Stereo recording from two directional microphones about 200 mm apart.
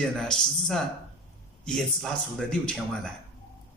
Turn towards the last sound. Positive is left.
turn(degrees=5)  # may be behind; listen again after turning